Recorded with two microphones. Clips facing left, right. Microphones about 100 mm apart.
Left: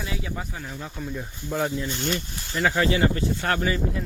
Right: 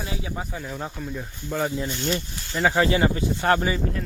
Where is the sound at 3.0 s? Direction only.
20° right (ahead or behind).